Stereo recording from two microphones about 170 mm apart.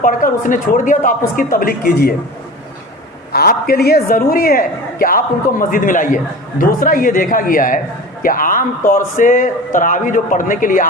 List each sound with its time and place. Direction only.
0.0 s speech: 50° left (ahead or behind)
3.3 s a woman's voice: 60° left (ahead or behind)